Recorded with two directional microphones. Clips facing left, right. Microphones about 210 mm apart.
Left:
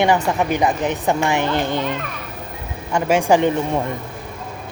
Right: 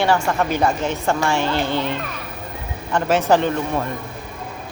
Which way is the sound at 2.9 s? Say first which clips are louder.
Left 1 dB; 10° left (ahead or behind).